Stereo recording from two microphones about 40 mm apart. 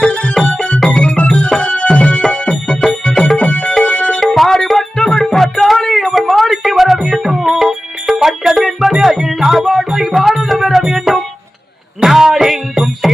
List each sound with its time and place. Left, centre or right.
0.0 s music: left
4.2 s music: centre
5.7 s a sound: centre
6.2 s music: centre